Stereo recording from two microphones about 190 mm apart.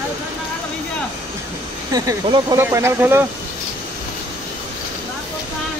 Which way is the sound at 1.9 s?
20° right (ahead or behind).